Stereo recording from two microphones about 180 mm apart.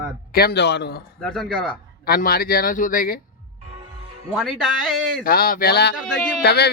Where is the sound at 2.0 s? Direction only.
55° left (ahead or behind).